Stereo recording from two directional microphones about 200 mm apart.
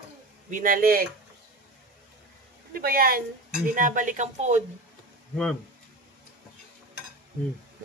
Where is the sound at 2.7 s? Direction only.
45° right (ahead or behind).